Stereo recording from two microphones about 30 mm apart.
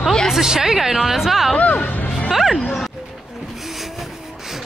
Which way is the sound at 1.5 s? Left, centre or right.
Left.